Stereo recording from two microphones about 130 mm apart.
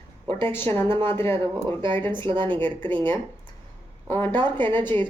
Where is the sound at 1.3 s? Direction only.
40° right (ahead or behind).